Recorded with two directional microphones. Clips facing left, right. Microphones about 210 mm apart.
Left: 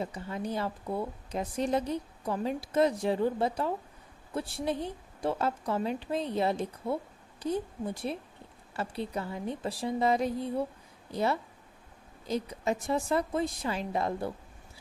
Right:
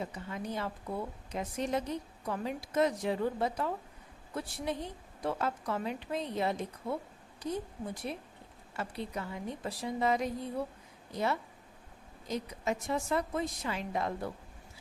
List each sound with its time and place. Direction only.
0.0 s a woman's voice: 35° left (ahead or behind)